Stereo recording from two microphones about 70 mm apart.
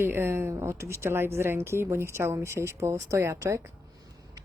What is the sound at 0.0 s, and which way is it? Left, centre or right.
A woman's voice, right.